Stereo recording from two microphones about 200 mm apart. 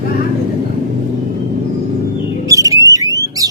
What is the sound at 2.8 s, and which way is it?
Alarm, 15° right (ahead or behind).